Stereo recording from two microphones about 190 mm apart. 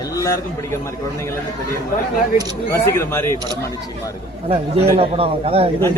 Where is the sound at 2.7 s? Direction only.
15° left (ahead or behind).